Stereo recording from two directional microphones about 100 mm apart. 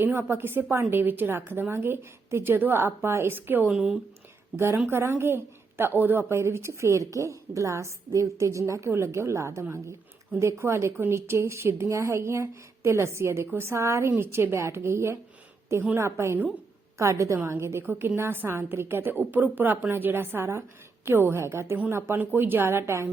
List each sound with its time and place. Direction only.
0.0 s a woman's voice: 20° right (ahead or behind)
4.5 s a woman's voice: 25° right (ahead or behind)